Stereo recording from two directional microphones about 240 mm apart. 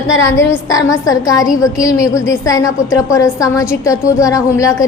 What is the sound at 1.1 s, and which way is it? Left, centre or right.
A woman's voice, centre.